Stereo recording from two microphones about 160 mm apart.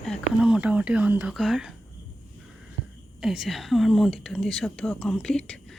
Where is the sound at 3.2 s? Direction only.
5° right (ahead or behind).